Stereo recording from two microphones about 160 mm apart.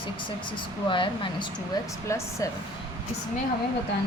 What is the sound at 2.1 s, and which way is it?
Speech, 20° left (ahead or behind).